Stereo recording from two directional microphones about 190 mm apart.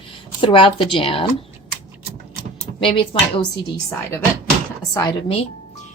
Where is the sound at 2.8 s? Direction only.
30° left (ahead or behind).